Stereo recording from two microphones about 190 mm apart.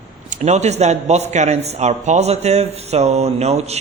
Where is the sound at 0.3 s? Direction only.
35° right (ahead or behind).